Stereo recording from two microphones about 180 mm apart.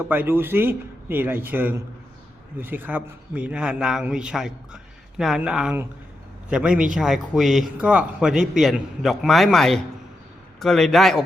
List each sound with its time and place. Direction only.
0.0 s a man's voice: 10° right (ahead or behind)